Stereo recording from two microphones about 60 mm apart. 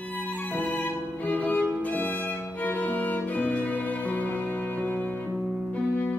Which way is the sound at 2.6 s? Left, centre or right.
Left.